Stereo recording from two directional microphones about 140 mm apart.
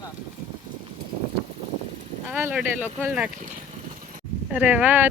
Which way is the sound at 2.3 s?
15° right (ahead or behind).